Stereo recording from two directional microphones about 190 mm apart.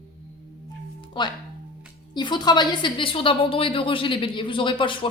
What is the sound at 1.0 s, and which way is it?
Music, 25° left (ahead or behind).